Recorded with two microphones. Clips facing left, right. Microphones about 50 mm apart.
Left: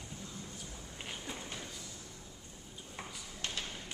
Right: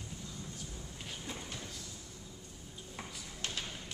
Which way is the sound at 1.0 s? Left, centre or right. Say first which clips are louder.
Left 1 dB; centre.